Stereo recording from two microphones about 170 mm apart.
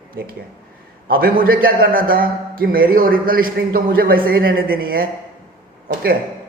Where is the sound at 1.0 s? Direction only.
60° right (ahead or behind).